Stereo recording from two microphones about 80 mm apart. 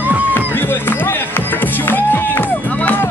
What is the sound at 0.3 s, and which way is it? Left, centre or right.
Music, left.